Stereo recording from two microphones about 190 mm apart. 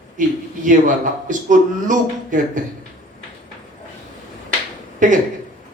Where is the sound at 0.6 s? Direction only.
45° right (ahead or behind).